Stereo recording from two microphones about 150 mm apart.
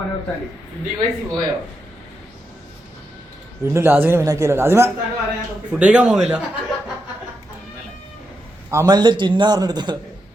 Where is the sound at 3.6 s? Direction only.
15° right (ahead or behind).